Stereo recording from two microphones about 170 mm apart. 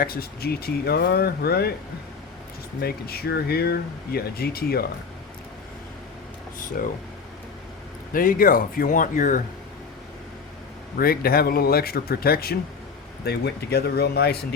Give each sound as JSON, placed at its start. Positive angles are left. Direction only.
{"t": 0.0, "sound": "speech", "side_deg": 60}
{"t": 2.8, "sound": "speech", "side_deg": 65}
{"t": 8.1, "sound": "a man's voice", "side_deg": 55}
{"t": 10.9, "sound": "a man's voice", "side_deg": 60}